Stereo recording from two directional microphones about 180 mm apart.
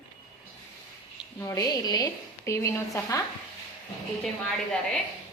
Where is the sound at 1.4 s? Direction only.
20° left (ahead or behind).